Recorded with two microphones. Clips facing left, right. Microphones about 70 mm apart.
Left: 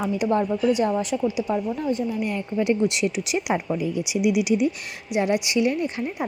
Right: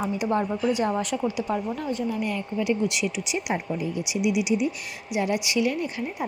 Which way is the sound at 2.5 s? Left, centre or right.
Left.